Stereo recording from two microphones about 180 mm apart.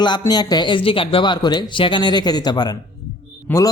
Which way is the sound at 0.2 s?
20° left (ahead or behind).